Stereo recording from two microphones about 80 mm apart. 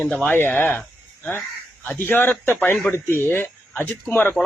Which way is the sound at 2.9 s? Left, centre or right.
Left.